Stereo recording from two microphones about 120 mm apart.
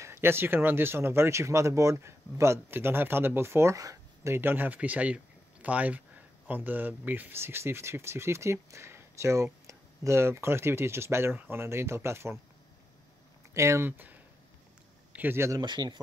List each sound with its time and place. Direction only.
0.0 s speech: 20° right (ahead or behind)
13.5 s speech: 25° right (ahead or behind)
15.6 s speech: 40° right (ahead or behind)